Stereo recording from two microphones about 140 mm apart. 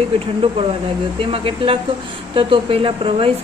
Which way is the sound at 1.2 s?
40° right (ahead or behind).